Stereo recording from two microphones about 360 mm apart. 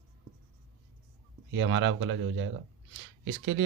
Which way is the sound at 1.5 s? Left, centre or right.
Right.